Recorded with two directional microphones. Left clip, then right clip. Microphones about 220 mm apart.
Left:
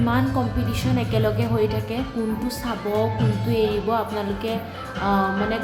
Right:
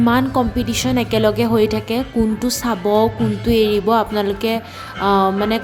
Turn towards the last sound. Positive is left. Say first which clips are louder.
# right 6 dB
turn(degrees=-50)  # may be behind; listen again after turning